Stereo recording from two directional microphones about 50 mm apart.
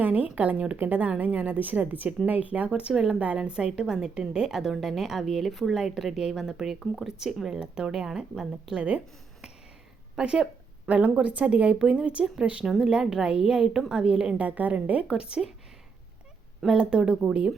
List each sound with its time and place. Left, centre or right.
0.0 s a woman's voice: right
2.9 s a woman's voice: centre
7.6 s a woman's voice: centre
10.2 s a sound: centre
10.9 s a woman's voice: right
12.7 s a woman's voice: centre
14.3 s a woman's voice: right
15.2 s a woman's voice: centre
16.6 s a woman's voice: centre